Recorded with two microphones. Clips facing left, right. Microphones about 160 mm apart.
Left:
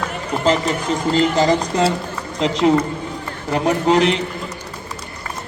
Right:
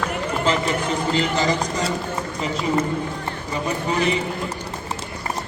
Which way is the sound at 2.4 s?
80° left.